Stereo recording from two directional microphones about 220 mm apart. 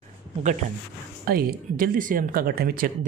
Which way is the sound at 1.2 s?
40° right (ahead or behind).